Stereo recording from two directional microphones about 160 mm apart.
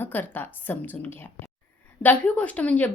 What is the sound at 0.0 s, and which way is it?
A woman's voice, 10° left (ahead or behind).